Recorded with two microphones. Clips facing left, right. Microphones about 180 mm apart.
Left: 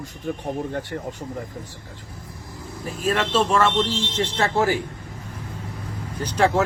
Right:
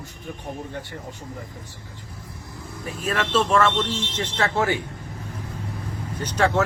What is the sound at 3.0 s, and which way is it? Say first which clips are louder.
Speech: left 2 dB; 30° left (ahead or behind).